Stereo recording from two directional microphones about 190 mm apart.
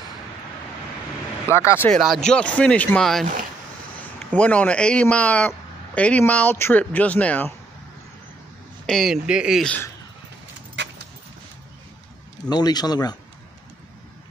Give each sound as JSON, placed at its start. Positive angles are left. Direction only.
{"t": 1.5, "sound": "a man's voice", "side_deg": 15}
{"t": 1.9, "sound": "speech", "side_deg": 0}
{"t": 4.3, "sound": "a man's voice", "side_deg": 5}
{"t": 8.8, "sound": "speech", "side_deg": 0}
{"t": 10.8, "sound": "keys jangling", "side_deg": -70}
{"t": 12.4, "sound": "speech", "side_deg": 20}